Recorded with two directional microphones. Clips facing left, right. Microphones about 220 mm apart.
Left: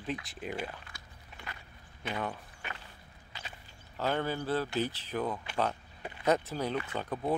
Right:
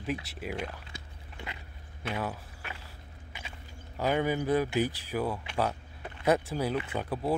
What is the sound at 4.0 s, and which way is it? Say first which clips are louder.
Speech: right 4 dB; 10° right (ahead or behind).